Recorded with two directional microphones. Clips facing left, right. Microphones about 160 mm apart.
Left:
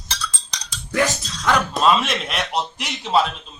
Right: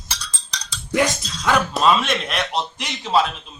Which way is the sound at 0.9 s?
15° right (ahead or behind).